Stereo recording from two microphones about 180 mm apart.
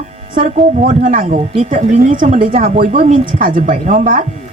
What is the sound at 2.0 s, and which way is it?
Speech, 45° right (ahead or behind).